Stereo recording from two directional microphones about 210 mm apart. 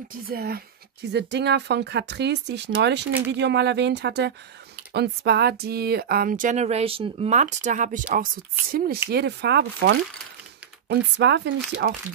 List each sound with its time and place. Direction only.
0.3 s speech: 45° right (ahead or behind)